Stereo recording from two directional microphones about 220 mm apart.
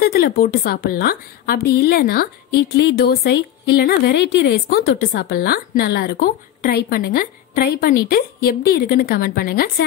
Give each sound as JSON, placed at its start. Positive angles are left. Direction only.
{"t": 0.0, "sound": "a woman's voice", "side_deg": 45}